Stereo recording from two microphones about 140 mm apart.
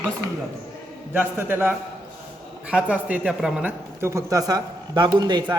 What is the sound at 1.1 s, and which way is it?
Speech, 15° right (ahead or behind).